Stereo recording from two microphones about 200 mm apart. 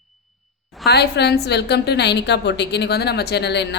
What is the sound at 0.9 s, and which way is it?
Speech, 55° left (ahead or behind).